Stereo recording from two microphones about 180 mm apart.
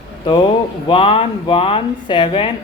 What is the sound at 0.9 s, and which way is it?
A woman's voice, 30° left (ahead or behind).